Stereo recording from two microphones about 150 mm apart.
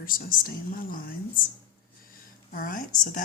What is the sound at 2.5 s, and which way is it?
Speech, 65° left (ahead or behind).